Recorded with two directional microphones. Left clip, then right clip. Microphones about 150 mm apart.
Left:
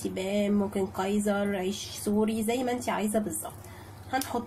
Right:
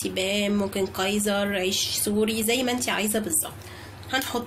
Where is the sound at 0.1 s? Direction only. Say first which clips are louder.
Right 4 dB; 30° left (ahead or behind).